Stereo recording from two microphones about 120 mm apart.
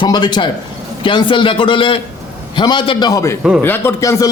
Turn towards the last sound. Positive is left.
turn(degrees=25)  # may be behind; listen again after turning